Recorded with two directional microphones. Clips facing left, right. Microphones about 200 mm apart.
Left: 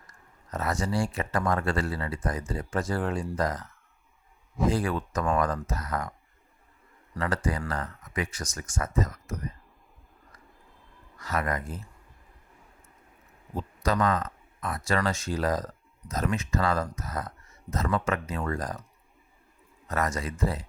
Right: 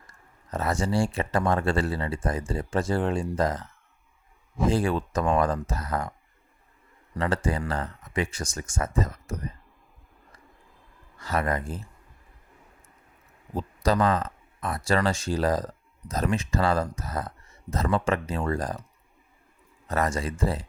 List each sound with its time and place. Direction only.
0.1 s speech: 30° right (ahead or behind)
7.1 s speech: 25° right (ahead or behind)
11.2 s speech: 30° right (ahead or behind)
13.5 s speech: 30° right (ahead or behind)
19.9 s speech: 30° right (ahead or behind)